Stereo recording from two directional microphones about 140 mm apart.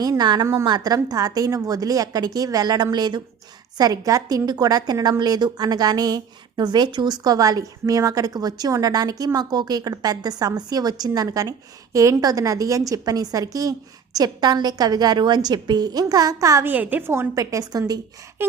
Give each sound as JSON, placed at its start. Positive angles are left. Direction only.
{"t": 0.0, "sound": "a woman's voice", "side_deg": -30}